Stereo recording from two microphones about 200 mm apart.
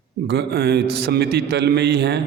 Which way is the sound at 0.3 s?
55° right (ahead or behind).